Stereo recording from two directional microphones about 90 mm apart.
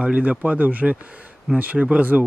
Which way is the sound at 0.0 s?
15° right (ahead or behind).